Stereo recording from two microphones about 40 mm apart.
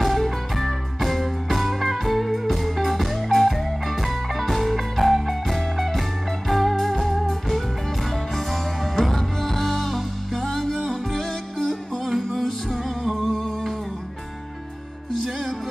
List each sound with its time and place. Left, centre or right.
0.0 s music: centre
8.9 s music: centre
13.0 s humming: centre